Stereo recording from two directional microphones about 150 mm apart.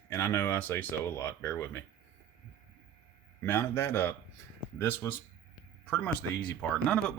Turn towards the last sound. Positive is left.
turn(degrees=5)  # may be behind; listen again after turning